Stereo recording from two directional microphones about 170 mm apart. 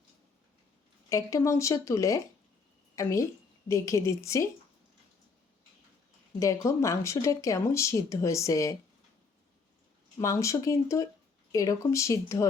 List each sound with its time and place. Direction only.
1.1 s a woman's voice: 20° left (ahead or behind)
6.4 s speech: 20° left (ahead or behind)
10.2 s speech: 15° left (ahead or behind)